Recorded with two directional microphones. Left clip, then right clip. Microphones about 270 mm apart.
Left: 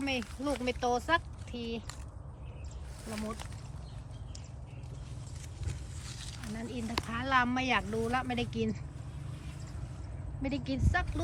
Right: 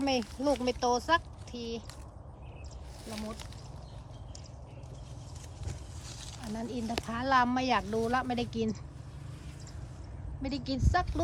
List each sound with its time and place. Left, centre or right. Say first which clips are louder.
0.0 s speech: right 4 dB; centre
6.4 s speech: right 3 dB; centre
10.4 s speech: even; centre